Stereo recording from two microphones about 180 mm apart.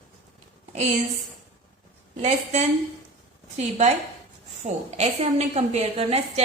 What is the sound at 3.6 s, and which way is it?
A woman's voice, 40° right (ahead or behind).